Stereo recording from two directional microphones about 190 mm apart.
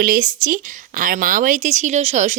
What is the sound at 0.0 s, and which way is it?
A woman's voice, 45° right (ahead or behind).